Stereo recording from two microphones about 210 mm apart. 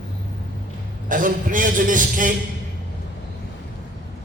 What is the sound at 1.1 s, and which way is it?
A man's voice, 40° right (ahead or behind).